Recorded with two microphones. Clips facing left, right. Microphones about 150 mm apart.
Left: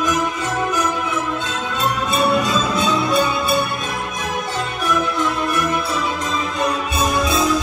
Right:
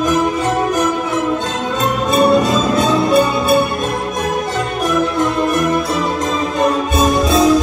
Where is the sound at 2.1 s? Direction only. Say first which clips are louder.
Right 7 dB; 45° right (ahead or behind).